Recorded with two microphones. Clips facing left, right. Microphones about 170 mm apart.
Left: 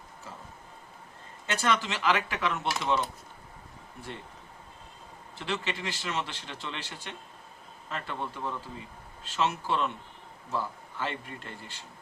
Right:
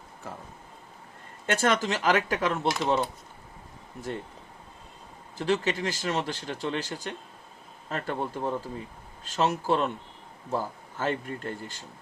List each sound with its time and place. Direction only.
1.5 s speech: 50° right (ahead or behind)
5.4 s speech: 40° right (ahead or behind)